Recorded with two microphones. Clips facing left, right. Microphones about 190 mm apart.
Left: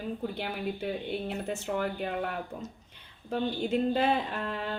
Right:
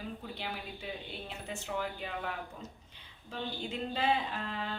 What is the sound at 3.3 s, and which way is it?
Speech, 55° left (ahead or behind).